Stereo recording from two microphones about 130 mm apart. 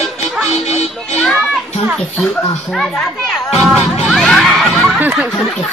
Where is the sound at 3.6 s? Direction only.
Centre (ahead or behind).